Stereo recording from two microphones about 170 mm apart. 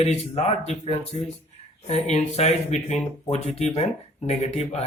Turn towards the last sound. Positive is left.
turn(degrees=40)  # may be behind; listen again after turning